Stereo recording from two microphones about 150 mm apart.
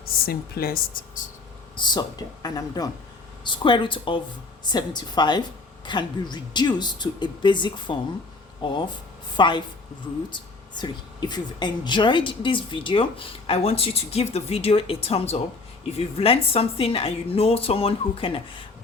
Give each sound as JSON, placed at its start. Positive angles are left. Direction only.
{"t": 0.0, "sound": "speech", "side_deg": 90}
{"t": 1.7, "sound": "speech", "side_deg": 30}